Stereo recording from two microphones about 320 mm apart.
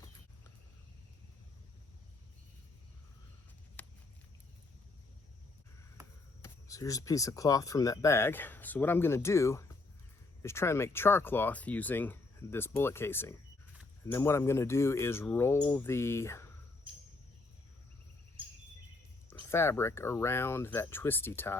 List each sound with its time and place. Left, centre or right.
3.8 s a sound: centre
6.4 s speech: centre
19.3 s speech: centre